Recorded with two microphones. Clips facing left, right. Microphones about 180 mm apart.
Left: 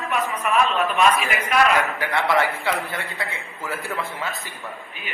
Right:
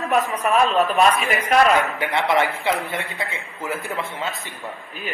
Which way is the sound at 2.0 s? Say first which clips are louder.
Right 1 dB; 20° right (ahead or behind).